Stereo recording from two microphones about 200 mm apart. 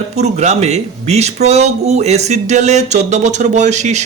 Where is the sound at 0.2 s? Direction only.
35° right (ahead or behind).